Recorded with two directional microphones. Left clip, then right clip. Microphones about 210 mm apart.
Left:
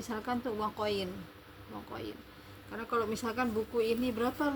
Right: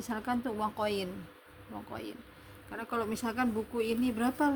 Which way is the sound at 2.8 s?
40° right (ahead or behind).